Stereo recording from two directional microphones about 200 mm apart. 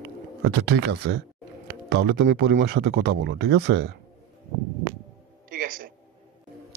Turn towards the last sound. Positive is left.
turn(degrees=-45)  # may be behind; listen again after turning